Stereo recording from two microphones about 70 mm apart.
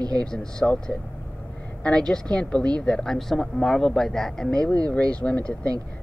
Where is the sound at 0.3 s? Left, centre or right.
Centre.